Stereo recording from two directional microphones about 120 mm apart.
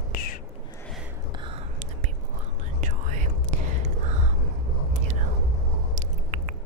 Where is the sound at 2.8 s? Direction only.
90° right.